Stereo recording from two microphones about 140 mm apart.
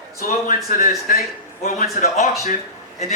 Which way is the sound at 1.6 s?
60° left (ahead or behind).